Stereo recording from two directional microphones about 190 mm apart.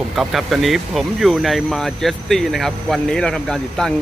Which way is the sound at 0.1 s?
Centre (ahead or behind).